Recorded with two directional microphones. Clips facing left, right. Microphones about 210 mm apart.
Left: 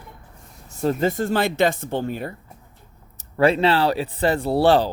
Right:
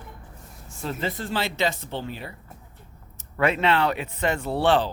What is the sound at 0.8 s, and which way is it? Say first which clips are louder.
Speech: left 9 dB; 45° left (ahead or behind).